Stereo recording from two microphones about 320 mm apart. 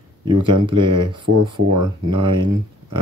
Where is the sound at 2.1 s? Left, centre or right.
Right.